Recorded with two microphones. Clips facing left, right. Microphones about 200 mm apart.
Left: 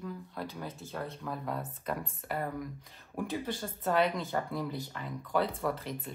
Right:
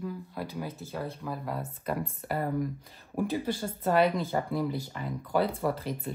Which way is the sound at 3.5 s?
5° right (ahead or behind).